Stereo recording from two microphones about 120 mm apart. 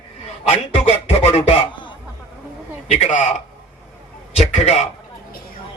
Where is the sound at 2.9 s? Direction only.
80° left.